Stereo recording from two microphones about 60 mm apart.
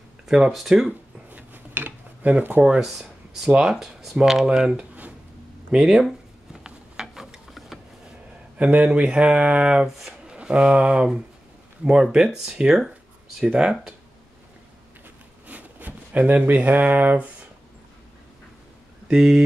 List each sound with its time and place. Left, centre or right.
0.5 s speech: centre
1.3 s dishes: right
2.8 s speech: centre
6.6 s a sound: centre
8.5 s speech: right
9.8 s speech: centre
10.2 s speech: centre
12.8 s a sound: centre
13.5 s speech: centre
15.4 s speech: right
19.0 s speech: centre